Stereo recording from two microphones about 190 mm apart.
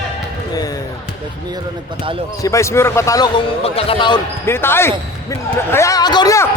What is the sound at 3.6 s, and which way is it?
Speech, 30° left (ahead or behind).